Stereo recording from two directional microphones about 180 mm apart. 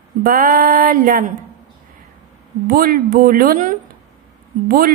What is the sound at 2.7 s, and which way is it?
Speech, 55° right (ahead or behind).